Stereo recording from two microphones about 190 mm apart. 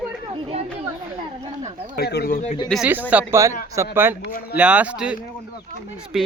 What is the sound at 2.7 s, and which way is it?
Speech, 5° right (ahead or behind).